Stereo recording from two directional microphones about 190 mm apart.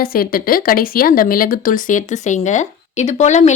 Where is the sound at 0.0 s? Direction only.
50° left (ahead or behind).